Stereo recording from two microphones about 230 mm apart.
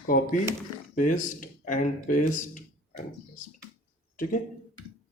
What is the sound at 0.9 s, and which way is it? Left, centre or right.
Speech, left.